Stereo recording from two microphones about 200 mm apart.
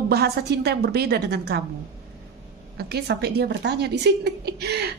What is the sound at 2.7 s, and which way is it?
A woman's voice, 55° right (ahead or behind).